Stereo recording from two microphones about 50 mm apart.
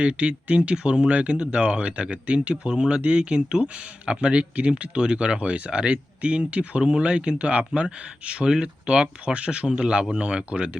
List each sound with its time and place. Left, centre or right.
0.0 s speech: right